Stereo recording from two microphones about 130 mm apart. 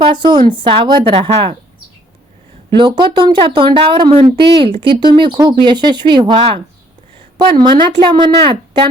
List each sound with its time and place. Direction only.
0.0 s speech: 35° right (ahead or behind)
2.6 s speech: 40° right (ahead or behind)